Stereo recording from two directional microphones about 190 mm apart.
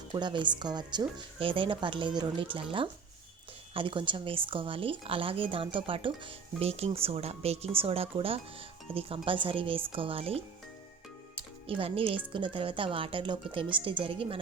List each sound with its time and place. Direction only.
0.1 s speech: 25° right (ahead or behind)
11.6 s speech: 30° right (ahead or behind)